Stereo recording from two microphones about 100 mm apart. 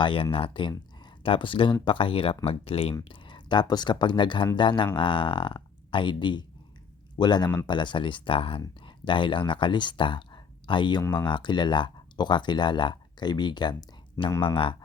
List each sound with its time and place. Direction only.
0.0 s speech: 60° left (ahead or behind)
3.0 s speech: 55° left (ahead or behind)
14.4 s speech: 60° left (ahead or behind)